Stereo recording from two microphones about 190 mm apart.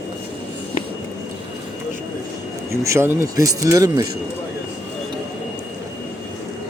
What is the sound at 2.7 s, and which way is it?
A man's voice, 15° right (ahead or behind).